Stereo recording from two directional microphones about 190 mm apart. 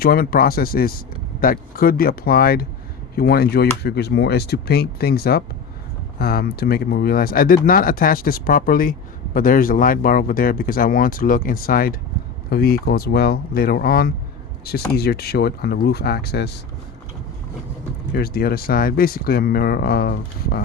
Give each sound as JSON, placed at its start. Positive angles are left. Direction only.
{"t": 0.0, "sound": "speech", "side_deg": 50}
{"t": 18.1, "sound": "speech", "side_deg": 55}